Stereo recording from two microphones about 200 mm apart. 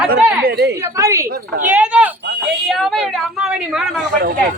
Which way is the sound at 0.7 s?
15° right (ahead or behind).